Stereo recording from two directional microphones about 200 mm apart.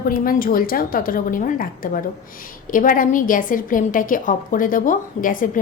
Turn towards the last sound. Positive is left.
turn(degrees=45)  # may be behind; listen again after turning